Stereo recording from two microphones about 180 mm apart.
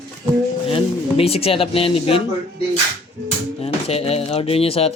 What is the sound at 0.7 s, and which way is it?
Speech, 30° left (ahead or behind).